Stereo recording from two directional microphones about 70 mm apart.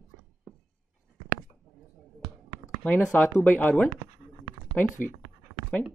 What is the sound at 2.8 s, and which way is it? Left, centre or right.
Speech, left.